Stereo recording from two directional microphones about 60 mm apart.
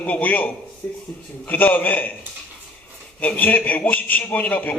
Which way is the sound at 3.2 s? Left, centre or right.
Left.